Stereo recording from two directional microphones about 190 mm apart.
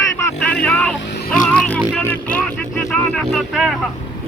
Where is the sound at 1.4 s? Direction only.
5° left (ahead or behind).